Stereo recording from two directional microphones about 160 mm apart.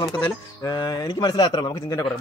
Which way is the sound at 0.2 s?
25° left (ahead or behind).